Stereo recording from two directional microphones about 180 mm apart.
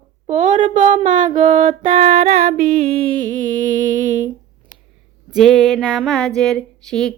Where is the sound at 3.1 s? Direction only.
45° right (ahead or behind).